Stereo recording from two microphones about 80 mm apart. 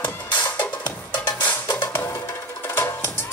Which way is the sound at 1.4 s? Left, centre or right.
Left.